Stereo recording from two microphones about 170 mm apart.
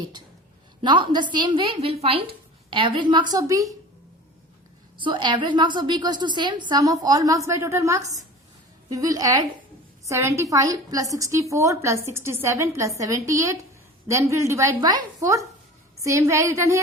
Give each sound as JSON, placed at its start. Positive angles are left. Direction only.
{"t": 0.8, "sound": "a woman's voice", "side_deg": -30}
{"t": 4.9, "sound": "a woman's voice", "side_deg": -30}